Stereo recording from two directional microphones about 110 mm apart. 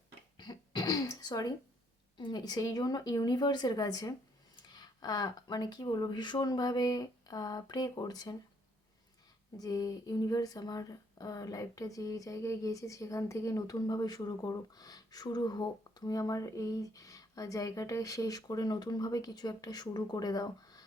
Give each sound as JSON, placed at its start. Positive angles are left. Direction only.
{"t": 0.3, "sound": "throat clearing", "side_deg": 40}
{"t": 2.1, "sound": "speech", "side_deg": 45}
{"t": 9.6, "sound": "speech", "side_deg": 35}